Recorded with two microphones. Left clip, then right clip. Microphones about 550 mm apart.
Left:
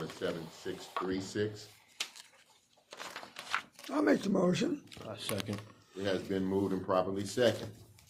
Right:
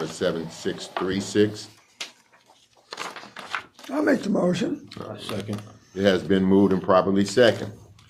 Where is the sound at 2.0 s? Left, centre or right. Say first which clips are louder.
Right 4 dB; left.